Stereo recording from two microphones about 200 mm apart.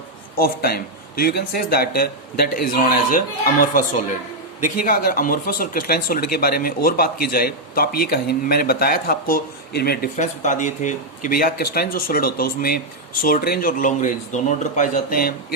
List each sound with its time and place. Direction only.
0.3 s speech: 50° left (ahead or behind)
10.2 s speech: 40° left (ahead or behind)